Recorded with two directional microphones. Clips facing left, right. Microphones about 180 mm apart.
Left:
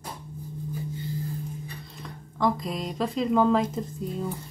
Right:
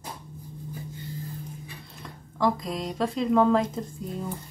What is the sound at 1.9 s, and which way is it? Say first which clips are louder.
Speech: right 2 dB; centre (ahead or behind).